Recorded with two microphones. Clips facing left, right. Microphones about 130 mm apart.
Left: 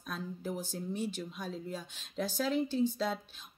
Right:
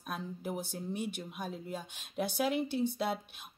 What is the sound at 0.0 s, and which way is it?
Speech, 10° right (ahead or behind).